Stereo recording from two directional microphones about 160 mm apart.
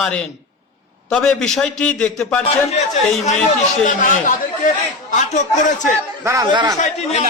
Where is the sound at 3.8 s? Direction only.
55° left (ahead or behind).